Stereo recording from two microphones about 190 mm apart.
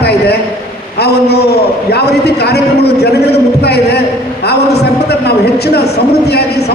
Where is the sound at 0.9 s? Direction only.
60° left (ahead or behind).